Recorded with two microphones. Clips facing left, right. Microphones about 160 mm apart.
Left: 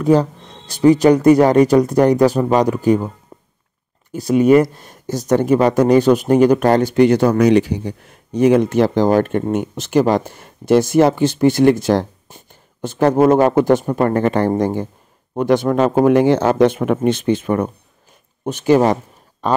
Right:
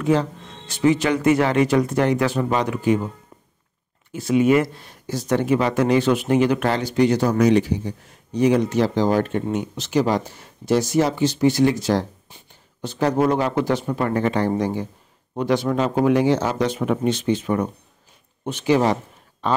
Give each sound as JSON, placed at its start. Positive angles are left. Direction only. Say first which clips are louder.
{"t": 0.0, "sound": "speech", "louder": "left 6 dB", "side_deg": 40}
{"t": 4.1, "sound": "speech", "louder": "left 5 dB", "side_deg": 40}